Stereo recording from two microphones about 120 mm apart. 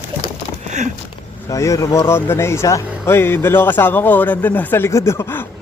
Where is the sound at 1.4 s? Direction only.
30° left (ahead or behind).